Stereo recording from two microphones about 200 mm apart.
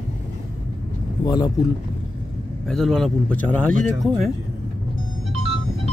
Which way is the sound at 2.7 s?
Centre (ahead or behind).